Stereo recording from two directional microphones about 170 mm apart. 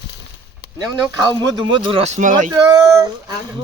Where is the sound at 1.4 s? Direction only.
25° right (ahead or behind); by 2.4 s 50° right (ahead or behind).